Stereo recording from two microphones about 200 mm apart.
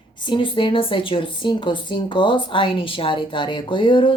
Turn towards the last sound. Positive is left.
turn(degrees=25)  # may be behind; listen again after turning